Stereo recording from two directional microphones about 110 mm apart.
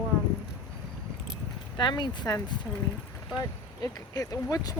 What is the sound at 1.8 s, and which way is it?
Speech, 40° left (ahead or behind).